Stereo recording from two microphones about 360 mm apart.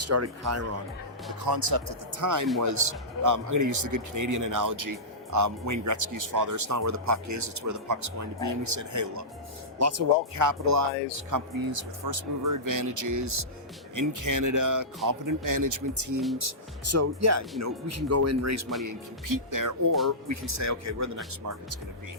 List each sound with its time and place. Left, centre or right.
0.0 s speech: right
1.5 s speech: right
11.3 s speech: right
18.9 s speech: right